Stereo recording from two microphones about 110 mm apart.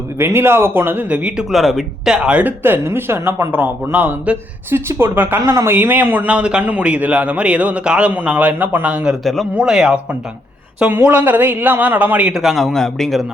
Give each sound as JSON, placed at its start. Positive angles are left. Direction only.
{"t": 0.2, "sound": "a man's voice", "side_deg": -20}
{"t": 9.2, "sound": "a man's voice", "side_deg": 0}
{"t": 10.8, "sound": "a man's voice", "side_deg": -15}